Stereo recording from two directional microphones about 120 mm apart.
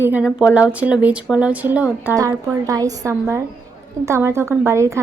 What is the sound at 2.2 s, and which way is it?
Speech, 30° right (ahead or behind).